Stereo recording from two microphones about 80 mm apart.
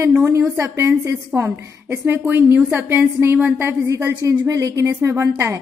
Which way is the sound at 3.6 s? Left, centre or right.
Right.